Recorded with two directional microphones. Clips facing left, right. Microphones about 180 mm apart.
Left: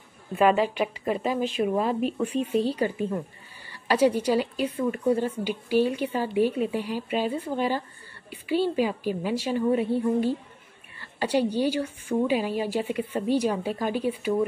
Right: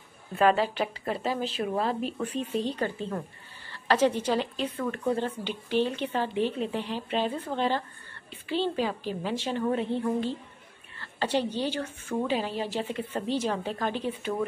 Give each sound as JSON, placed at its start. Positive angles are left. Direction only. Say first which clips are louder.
{"t": 1.0, "sound": "speech", "louder": "left 5 dB", "side_deg": 15}
{"t": 1.3, "sound": "speech", "louder": "left 4 dB", "side_deg": -35}
{"t": 1.6, "sound": "a woman's voice", "louder": "left 5 dB", "side_deg": 10}
{"t": 11.0, "sound": "a sound", "louder": "left 3 dB", "side_deg": 10}
{"t": 11.5, "sound": "speech", "louder": "left 5 dB", "side_deg": 10}